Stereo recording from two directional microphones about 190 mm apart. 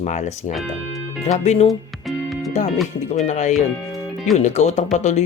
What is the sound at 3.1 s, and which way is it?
Speech, 40° left (ahead or behind).